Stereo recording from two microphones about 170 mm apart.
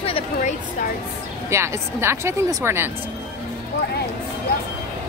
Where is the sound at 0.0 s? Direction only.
40° left (ahead or behind).